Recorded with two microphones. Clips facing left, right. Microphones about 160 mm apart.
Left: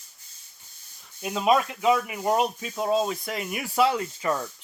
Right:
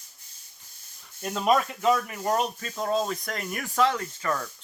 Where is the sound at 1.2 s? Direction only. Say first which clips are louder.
Left 1 dB; 5° left (ahead or behind); by 4.5 s 20° left (ahead or behind).